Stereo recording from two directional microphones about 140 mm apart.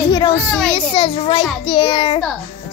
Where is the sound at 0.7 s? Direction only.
40° left (ahead or behind).